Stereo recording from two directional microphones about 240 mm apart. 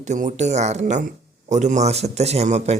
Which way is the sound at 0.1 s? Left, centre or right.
Right.